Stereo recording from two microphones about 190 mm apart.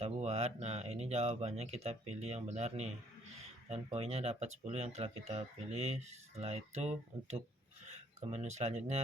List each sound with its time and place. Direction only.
0.0 s speech: 35° right (ahead or behind)
3.9 s speech: 35° right (ahead or behind)